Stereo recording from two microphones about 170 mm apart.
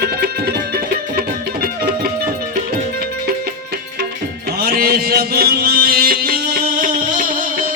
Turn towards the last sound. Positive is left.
turn(degrees=-55)  # may be behind; listen again after turning